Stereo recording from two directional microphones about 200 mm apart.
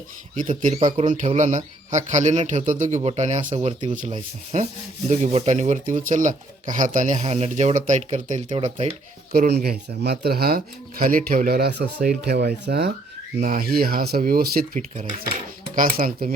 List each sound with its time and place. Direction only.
0.3 s a man's voice: 40° right (ahead or behind)
9.3 s speech: 50° right (ahead or behind)
14.8 s a man's voice: 35° right (ahead or behind)